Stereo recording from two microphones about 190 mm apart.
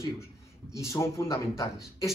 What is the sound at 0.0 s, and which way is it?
A man's voice, 15° left (ahead or behind).